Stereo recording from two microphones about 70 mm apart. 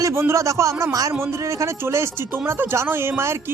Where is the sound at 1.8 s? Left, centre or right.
Right.